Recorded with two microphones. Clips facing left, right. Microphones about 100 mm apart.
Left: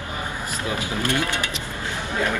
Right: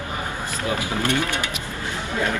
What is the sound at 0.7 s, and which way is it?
Speech, 20° right (ahead or behind).